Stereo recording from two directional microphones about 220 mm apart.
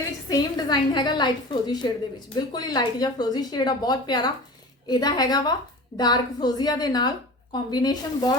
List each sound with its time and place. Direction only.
0.3 s a woman's voice: 15° left (ahead or behind)